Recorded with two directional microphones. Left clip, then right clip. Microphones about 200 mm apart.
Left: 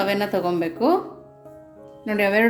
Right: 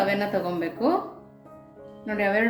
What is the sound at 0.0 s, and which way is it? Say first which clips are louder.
Speech: left 3 dB; 35° left (ahead or behind).